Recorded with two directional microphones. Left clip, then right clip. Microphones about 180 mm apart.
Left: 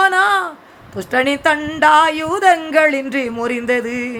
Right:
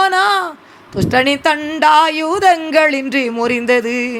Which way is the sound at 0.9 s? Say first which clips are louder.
Right 3 dB; 15° right (ahead or behind).